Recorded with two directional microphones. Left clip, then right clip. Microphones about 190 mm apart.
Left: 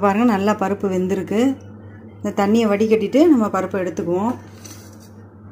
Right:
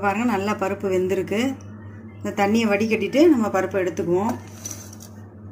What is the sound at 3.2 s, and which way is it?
Speech, 35° left (ahead or behind).